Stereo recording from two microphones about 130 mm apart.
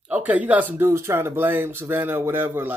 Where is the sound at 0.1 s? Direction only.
10° right (ahead or behind).